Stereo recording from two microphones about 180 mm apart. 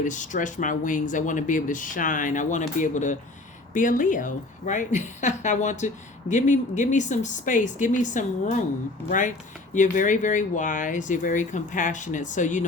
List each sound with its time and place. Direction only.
0.0 s a woman's voice: 45° left (ahead or behind)